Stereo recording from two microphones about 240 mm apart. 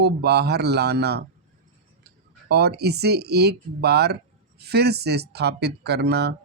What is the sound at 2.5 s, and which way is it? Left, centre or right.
Speech, right.